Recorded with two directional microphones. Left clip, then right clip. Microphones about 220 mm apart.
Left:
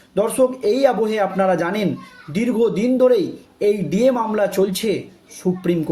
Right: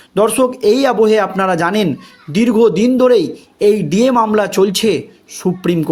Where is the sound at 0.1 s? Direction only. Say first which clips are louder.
Right 5 dB; 45° right (ahead or behind).